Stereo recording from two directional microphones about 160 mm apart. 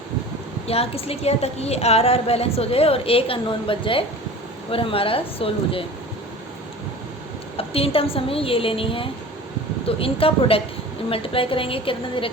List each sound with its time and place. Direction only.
0.7 s a woman's voice: 40° left (ahead or behind)
7.5 s a woman's voice: 35° left (ahead or behind)